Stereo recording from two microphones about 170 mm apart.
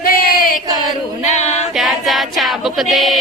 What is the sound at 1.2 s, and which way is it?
Female singing, 40° left (ahead or behind).